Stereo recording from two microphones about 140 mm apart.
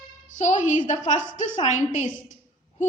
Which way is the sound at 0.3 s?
60° left (ahead or behind).